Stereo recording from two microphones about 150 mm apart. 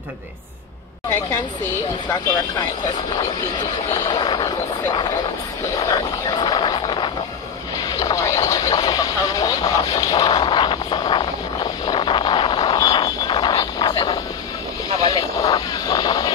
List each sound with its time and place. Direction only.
4.1 s vehicle: 30° left (ahead or behind)
6.3 s vehicle: 30° left (ahead or behind)